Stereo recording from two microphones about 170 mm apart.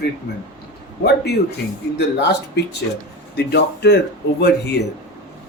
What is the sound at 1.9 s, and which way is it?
Speech, 75° left (ahead or behind).